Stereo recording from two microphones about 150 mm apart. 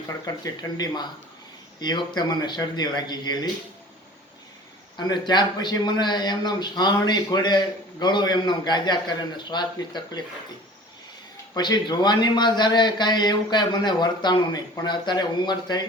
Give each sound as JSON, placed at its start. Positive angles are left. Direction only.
{"t": 1.8, "sound": "a man's voice", "side_deg": 30}
{"t": 4.9, "sound": "a man's voice", "side_deg": 30}
{"t": 11.5, "sound": "a man's voice", "side_deg": 25}